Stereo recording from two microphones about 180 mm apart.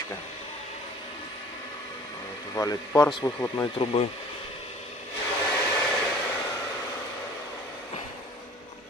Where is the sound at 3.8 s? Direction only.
30° left (ahead or behind).